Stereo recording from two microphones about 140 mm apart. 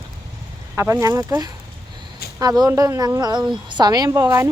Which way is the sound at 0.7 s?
20° right (ahead or behind).